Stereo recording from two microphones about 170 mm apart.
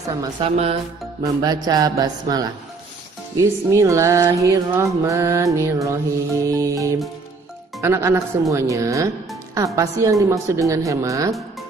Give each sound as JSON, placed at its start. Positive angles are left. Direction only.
{"t": 0.4, "sound": "speech", "side_deg": -35}
{"t": 1.2, "sound": "speech", "side_deg": -20}
{"t": 3.3, "sound": "music", "side_deg": -20}
{"t": 6.4, "sound": "speech", "side_deg": -20}
{"t": 7.8, "sound": "music", "side_deg": -15}
{"t": 9.8, "sound": "speech", "side_deg": -20}